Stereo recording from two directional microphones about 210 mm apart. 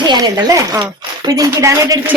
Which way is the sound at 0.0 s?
20° right (ahead or behind).